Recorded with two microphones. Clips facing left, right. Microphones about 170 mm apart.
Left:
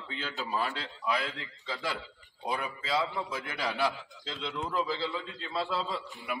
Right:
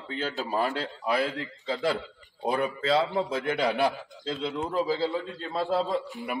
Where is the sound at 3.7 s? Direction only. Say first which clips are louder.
Right 5 dB; 55° right (ahead or behind).